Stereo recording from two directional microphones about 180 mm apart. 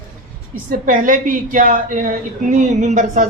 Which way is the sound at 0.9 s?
50° right (ahead or behind).